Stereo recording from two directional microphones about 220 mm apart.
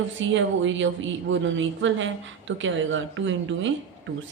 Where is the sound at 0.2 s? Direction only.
60° right (ahead or behind).